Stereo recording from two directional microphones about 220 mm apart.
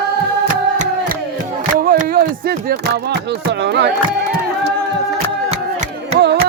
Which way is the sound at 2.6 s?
45° right (ahead or behind).